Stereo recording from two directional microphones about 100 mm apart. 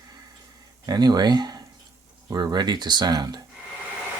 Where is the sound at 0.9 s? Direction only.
45° right (ahead or behind).